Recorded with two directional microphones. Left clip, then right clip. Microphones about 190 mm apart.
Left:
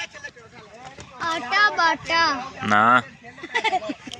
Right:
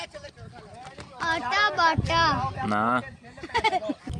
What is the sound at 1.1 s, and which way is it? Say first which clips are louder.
A child's voice: left 3 dB; 25° left (ahead or behind).